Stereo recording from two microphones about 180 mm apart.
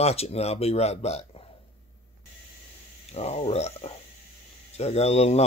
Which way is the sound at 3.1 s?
35° left (ahead or behind).